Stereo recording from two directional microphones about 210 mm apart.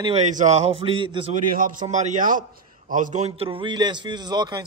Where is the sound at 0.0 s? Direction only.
30° right (ahead or behind).